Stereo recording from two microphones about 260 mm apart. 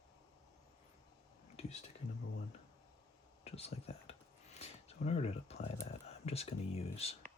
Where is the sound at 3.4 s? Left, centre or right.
Left.